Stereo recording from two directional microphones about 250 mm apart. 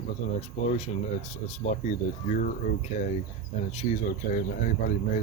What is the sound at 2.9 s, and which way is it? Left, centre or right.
Speech, left.